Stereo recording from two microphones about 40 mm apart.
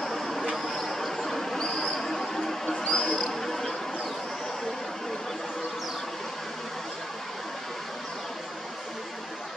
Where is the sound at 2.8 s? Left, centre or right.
Left.